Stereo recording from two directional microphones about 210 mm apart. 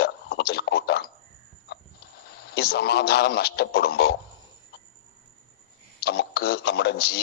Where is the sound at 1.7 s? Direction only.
50° left (ahead or behind).